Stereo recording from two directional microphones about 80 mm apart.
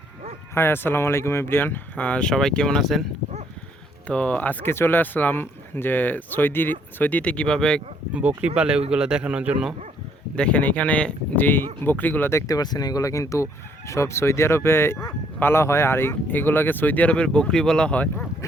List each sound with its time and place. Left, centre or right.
0.5 s speech: left; by 3.1 s centre
4.0 s speech: centre
8.1 s speech: centre
10.3 s speech: centre
12.3 s speech: left
12.5 s speech: left; by 18.1 s centre